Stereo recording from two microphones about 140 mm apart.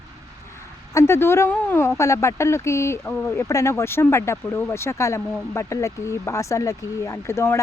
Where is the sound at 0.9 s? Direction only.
20° left (ahead or behind).